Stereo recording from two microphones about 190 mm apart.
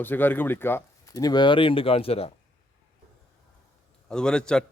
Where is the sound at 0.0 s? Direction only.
10° left (ahead or behind); by 2.3 s 30° left (ahead or behind).